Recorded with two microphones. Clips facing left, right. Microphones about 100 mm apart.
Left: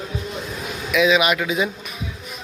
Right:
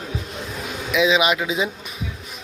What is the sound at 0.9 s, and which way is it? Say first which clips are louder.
Speech: left 1 dB; 25° right (ahead or behind).